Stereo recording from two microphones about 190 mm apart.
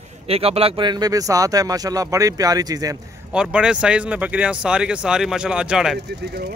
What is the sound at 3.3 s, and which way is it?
Speech, 5° right (ahead or behind).